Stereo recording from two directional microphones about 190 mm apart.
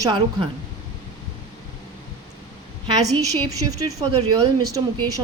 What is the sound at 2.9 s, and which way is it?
A woman's voice, 20° right (ahead or behind).